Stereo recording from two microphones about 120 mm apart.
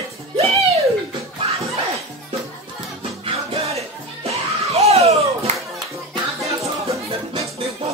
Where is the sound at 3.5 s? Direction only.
60° right (ahead or behind).